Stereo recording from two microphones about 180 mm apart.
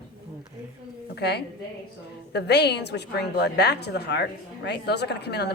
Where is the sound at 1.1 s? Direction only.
65° left (ahead or behind).